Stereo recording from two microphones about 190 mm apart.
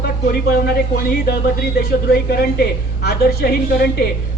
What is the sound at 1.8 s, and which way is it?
A woman's voice, 50° left (ahead or behind).